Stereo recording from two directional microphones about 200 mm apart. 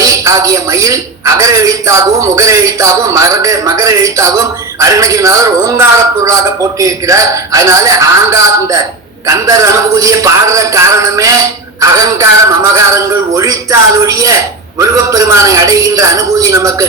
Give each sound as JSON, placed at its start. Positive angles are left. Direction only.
{"t": 0.0, "sound": "speech", "side_deg": -15}
{"t": 1.4, "sound": "music", "side_deg": -15}